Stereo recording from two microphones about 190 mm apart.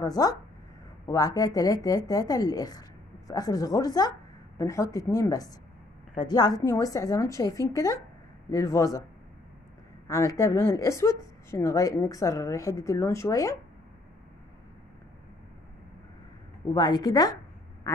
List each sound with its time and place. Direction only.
0.0 s a woman's voice: 20° left (ahead or behind)
10.0 s a woman's voice: 15° left (ahead or behind)
16.7 s speech: 20° left (ahead or behind)